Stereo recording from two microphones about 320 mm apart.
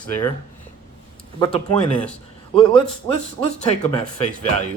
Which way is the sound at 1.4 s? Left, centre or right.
Centre.